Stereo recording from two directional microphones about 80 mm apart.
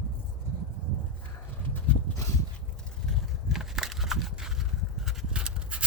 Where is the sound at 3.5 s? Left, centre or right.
Centre.